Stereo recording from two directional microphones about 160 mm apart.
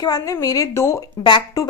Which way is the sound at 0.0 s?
20° left (ahead or behind).